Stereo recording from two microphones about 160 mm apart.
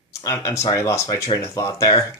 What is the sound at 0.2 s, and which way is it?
Speech, 20° left (ahead or behind).